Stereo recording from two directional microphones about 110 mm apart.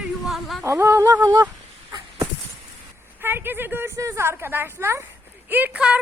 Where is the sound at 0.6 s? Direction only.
25° right (ahead or behind).